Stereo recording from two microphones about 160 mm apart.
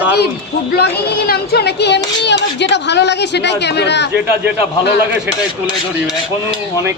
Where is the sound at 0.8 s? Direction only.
85° left.